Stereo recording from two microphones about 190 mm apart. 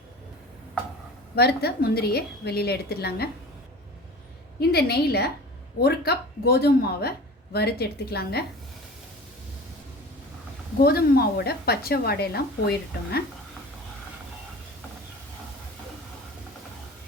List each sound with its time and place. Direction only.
1.4 s a woman's voice: 55° left (ahead or behind)
4.7 s a woman's voice: 55° left (ahead or behind)
10.8 s a woman's voice: 55° left (ahead or behind)